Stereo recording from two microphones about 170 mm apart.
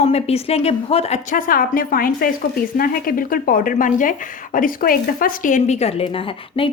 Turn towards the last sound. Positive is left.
turn(degrees=30)  # may be behind; listen again after turning